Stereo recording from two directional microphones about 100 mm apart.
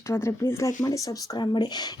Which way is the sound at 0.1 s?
25° left (ahead or behind).